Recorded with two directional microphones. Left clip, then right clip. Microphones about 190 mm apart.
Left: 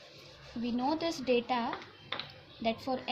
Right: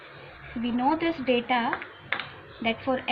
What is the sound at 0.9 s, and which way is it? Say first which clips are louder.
A woman's voice: right 6 dB; 90° left.